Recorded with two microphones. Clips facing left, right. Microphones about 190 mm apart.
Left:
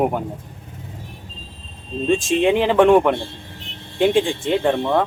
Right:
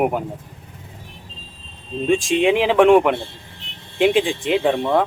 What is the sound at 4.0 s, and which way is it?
Speech, centre (ahead or behind).